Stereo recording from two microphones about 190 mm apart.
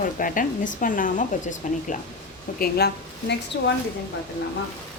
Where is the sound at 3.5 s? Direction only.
55° left (ahead or behind).